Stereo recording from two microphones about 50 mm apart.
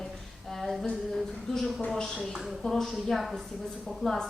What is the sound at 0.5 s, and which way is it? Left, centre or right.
A woman's voice, centre.